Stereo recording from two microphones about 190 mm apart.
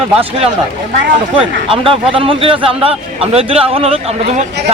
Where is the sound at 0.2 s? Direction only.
30° right (ahead or behind).